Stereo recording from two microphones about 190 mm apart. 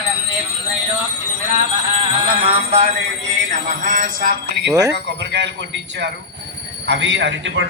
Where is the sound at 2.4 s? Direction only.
30° right (ahead or behind).